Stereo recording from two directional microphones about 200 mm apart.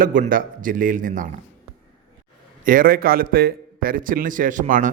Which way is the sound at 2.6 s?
45° right (ahead or behind).